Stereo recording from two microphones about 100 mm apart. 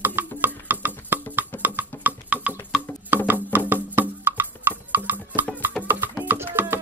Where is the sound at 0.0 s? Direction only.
20° right (ahead or behind).